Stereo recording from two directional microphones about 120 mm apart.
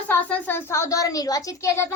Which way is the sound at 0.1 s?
15° left (ahead or behind).